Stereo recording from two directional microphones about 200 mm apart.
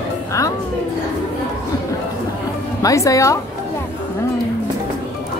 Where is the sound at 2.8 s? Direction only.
15° left (ahead or behind).